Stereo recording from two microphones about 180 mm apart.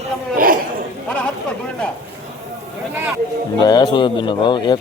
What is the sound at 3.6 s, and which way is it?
Speech, 25° left (ahead or behind).